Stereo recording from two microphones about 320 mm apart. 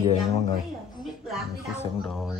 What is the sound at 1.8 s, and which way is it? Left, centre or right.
Speech, centre.